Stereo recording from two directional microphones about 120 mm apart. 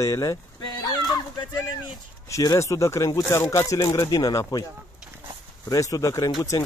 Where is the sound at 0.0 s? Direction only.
30° left (ahead or behind).